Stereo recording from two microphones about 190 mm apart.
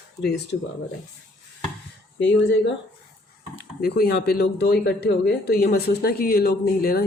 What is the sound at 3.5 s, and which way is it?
Speech, 55° left (ahead or behind).